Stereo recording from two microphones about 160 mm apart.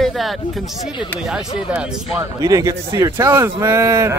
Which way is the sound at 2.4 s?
20° right (ahead or behind).